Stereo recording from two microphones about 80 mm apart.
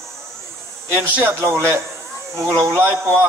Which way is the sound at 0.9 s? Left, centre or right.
Right.